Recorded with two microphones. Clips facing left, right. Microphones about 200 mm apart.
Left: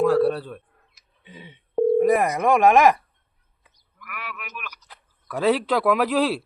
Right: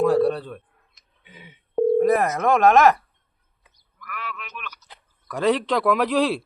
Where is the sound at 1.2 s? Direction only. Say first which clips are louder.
Left 4 dB; 30° left (ahead or behind).